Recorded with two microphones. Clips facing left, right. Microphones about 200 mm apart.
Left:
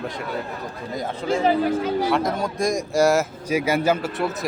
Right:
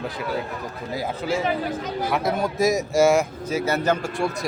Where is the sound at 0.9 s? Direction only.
5° right (ahead or behind).